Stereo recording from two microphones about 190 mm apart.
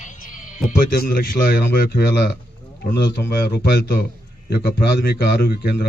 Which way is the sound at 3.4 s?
55° left (ahead or behind).